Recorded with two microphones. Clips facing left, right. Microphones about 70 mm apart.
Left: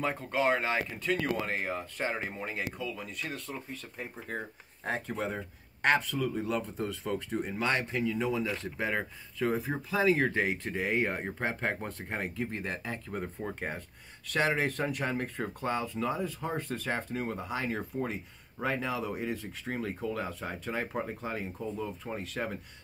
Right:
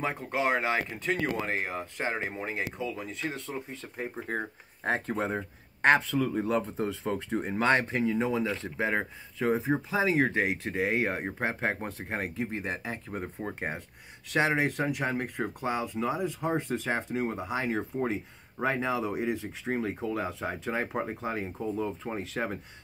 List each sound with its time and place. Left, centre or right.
0.0 s speech: centre